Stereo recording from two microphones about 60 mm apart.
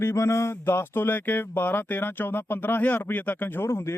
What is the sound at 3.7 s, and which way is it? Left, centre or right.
Speech, left.